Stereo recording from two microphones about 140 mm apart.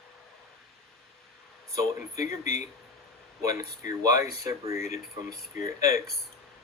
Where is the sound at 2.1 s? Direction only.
55° left (ahead or behind).